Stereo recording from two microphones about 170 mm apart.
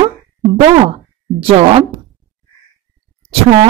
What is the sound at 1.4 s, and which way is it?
Speech, 35° right (ahead or behind).